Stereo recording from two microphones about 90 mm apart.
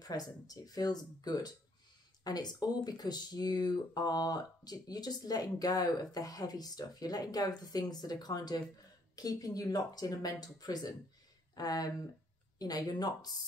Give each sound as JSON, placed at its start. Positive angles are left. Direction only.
{"t": 0.0, "sound": "speech", "side_deg": 45}